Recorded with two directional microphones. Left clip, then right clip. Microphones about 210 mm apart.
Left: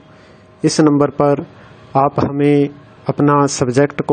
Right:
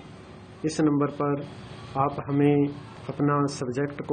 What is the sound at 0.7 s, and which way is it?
Speech, 50° left (ahead or behind).